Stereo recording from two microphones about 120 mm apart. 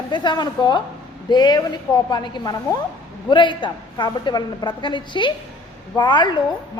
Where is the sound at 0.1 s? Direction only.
40° left (ahead or behind).